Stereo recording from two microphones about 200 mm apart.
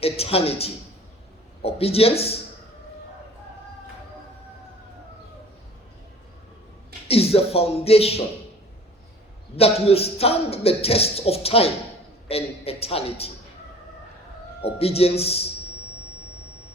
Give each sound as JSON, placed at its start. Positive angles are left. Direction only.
{"t": 0.0, "sound": "a man's voice", "side_deg": 30}
{"t": 7.1, "sound": "a man's voice", "side_deg": 30}
{"t": 9.6, "sound": "a man's voice", "side_deg": 30}
{"t": 14.6, "sound": "a man's voice", "side_deg": 30}